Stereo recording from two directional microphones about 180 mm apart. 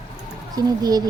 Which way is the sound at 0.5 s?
20° right (ahead or behind).